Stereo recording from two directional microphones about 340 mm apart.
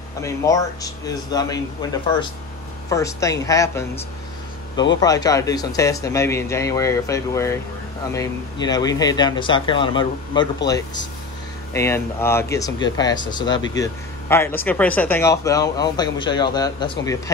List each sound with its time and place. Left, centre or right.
0.2 s speech: centre
5.0 s speech: centre